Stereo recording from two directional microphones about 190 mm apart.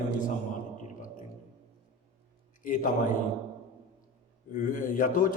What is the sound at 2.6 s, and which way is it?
Speech, 45° left (ahead or behind).